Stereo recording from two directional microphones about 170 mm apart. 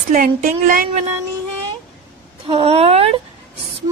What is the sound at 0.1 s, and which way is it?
Speech, 50° right (ahead or behind).